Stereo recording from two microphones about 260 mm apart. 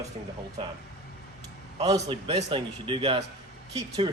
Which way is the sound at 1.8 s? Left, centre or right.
Centre.